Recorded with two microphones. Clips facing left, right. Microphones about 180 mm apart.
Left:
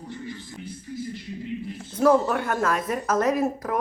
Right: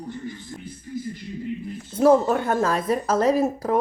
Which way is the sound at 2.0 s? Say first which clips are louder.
Right 3 dB; 25° right (ahead or behind).